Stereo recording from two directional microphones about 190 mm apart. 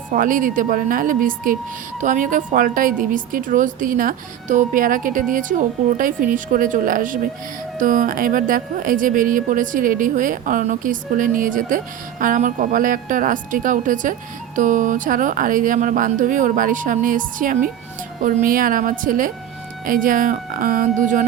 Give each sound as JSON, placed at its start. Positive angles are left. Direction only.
{"t": 0.1, "sound": "speech", "side_deg": -45}